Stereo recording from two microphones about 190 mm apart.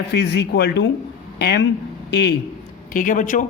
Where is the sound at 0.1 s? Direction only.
60° left (ahead or behind).